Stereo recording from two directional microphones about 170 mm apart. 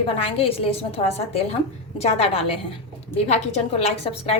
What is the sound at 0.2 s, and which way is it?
A woman's voice, 35° left (ahead or behind).